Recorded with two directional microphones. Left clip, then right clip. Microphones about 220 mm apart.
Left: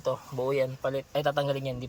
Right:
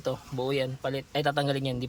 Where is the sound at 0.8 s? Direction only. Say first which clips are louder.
Left 1 dB; 20° right (ahead or behind).